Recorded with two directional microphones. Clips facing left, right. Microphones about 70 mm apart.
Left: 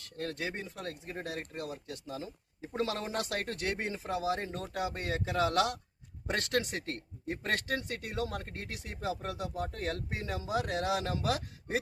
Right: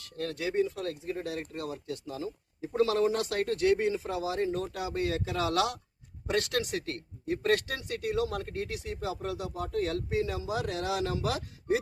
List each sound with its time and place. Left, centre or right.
0.2 s speech: left